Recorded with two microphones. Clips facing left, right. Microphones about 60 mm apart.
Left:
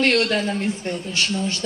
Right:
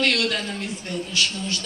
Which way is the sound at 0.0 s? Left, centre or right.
Left.